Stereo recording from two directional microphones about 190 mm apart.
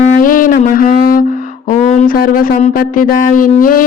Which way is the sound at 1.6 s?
40° left (ahead or behind).